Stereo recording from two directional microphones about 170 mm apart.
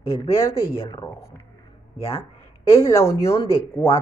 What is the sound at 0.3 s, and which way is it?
Speech, 15° left (ahead or behind).